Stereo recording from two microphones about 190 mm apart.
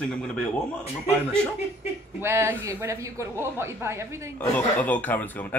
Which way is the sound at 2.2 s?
15° right (ahead or behind).